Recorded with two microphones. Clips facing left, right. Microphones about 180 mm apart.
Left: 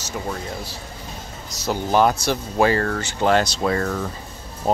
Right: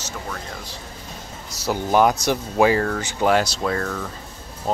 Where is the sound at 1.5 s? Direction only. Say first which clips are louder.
Even; 10° right (ahead or behind).